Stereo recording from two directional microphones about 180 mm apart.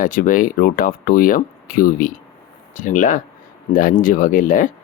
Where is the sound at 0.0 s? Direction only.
50° left (ahead or behind).